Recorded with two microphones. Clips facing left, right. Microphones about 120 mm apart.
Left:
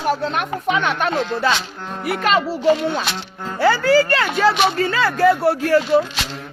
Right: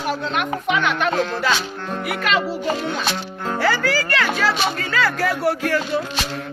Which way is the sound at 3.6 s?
25° left (ahead or behind).